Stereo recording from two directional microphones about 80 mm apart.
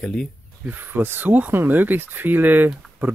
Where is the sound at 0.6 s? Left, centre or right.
Right.